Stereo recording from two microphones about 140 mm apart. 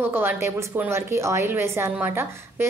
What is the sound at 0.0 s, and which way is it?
A woman's voice, 15° right (ahead or behind).